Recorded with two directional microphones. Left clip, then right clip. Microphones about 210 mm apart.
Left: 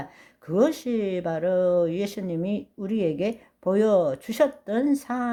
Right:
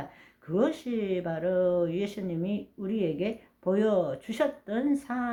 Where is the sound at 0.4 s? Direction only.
45° left (ahead or behind).